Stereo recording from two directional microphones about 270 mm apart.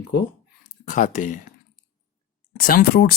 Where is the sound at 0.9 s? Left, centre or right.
Left.